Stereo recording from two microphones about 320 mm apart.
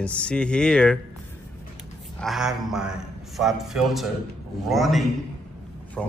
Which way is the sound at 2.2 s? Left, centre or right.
Centre.